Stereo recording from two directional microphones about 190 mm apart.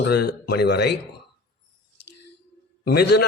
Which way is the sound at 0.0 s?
60° left (ahead or behind).